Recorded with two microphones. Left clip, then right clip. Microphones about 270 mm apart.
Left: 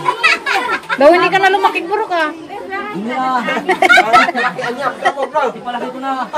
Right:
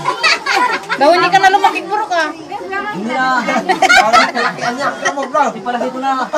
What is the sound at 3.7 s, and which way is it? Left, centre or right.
Speech, left.